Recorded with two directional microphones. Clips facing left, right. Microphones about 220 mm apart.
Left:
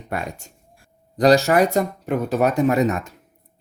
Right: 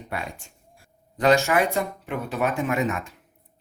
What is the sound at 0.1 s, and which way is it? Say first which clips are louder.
Speech: left 5 dB; 45° left (ahead or behind).